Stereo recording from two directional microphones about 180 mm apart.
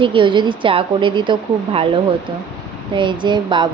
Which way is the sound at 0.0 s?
25° right (ahead or behind).